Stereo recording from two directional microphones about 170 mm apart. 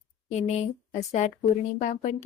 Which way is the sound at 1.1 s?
45° left (ahead or behind).